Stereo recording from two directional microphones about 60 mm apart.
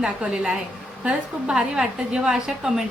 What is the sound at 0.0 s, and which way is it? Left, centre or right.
A woman's voice, centre.